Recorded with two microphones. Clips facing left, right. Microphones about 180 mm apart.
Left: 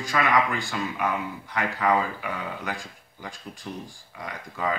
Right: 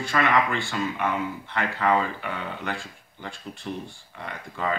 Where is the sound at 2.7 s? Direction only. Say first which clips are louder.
Right 2 dB; 15° left (ahead or behind).